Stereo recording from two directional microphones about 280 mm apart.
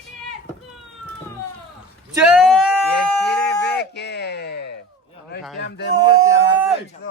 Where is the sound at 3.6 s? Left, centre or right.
Left.